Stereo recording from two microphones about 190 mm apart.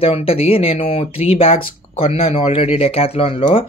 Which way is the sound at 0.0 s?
30° left (ahead or behind).